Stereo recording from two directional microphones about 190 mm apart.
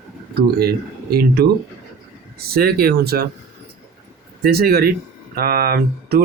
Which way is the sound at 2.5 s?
50° right (ahead or behind).